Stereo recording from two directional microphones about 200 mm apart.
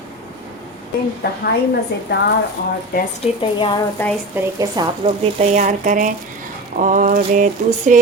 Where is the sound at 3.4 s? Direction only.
25° left (ahead or behind).